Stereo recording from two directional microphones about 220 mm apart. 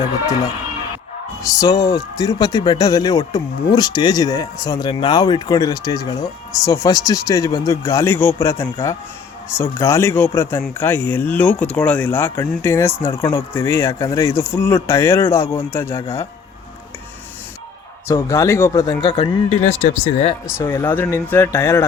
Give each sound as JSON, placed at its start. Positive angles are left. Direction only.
{"t": 1.5, "sound": "speech", "side_deg": 15}
{"t": 18.1, "sound": "speech", "side_deg": 15}
{"t": 19.0, "sound": "speech", "side_deg": 25}
{"t": 20.6, "sound": "speech", "side_deg": 10}